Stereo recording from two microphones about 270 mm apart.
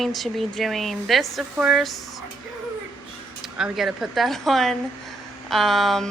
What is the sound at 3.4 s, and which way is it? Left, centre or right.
A woman's voice, centre.